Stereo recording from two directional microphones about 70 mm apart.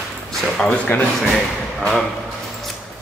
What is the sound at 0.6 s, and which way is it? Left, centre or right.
Speech, centre.